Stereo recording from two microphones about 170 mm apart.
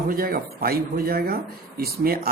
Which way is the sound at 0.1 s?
60° right (ahead or behind).